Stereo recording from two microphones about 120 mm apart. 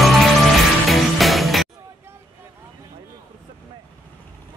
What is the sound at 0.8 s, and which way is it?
Music, centre (ahead or behind).